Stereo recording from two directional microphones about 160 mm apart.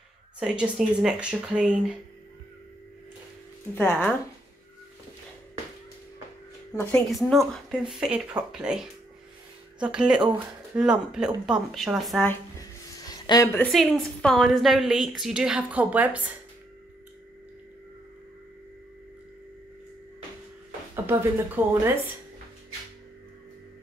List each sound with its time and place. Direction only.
0.4 s a woman's voice: 5° right (ahead or behind)
3.7 s speech: 10° left (ahead or behind)
6.7 s a woman's voice: 15° left (ahead or behind)
7.1 s a woman's voice: centre (ahead or behind)
13.1 s speech: 20° left (ahead or behind)
13.7 s a woman's voice: centre (ahead or behind)
20.9 s a sound: 15° right (ahead or behind)
21.6 s a woman's voice: 10° right (ahead or behind)